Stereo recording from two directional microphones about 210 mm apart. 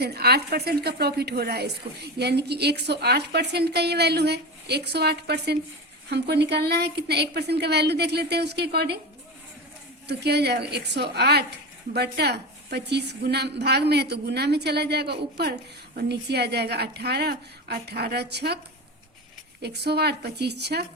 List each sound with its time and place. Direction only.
0.0 s a woman's voice: 50° right (ahead or behind)
10.1 s a woman's voice: 50° right (ahead or behind)
19.6 s a woman's voice: 50° right (ahead or behind)